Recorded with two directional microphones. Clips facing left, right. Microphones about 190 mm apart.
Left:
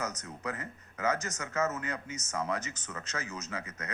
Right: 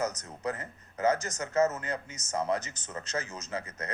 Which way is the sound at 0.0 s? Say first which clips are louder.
Right 4 dB; 30° right (ahead or behind).